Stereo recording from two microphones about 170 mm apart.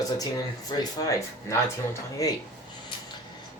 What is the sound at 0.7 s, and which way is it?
Speech, 25° left (ahead or behind).